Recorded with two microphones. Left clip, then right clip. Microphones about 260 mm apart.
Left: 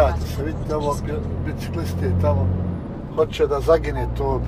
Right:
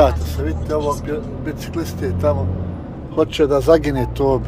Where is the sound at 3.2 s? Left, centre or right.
Right.